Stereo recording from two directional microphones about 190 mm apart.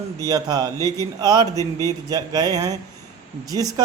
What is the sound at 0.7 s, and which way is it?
Speech, 15° left (ahead or behind).